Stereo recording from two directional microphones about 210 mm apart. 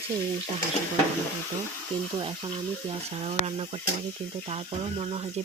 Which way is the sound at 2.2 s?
25° right (ahead or behind).